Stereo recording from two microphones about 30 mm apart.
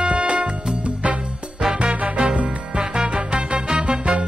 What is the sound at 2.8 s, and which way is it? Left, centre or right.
Music, right.